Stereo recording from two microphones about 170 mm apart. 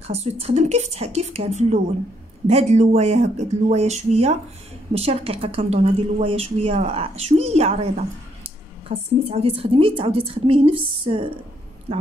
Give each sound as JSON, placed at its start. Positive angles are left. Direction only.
{"t": 0.0, "sound": "a woman's voice", "side_deg": -40}